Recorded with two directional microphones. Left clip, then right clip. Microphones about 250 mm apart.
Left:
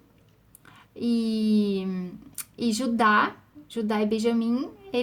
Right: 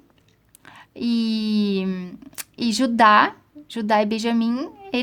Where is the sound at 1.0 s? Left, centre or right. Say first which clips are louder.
Right 3 dB; right.